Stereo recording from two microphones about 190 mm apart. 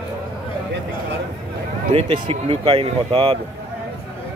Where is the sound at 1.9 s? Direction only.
30° right (ahead or behind).